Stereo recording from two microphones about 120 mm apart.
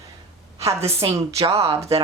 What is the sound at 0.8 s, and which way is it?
Speech, 55° right (ahead or behind).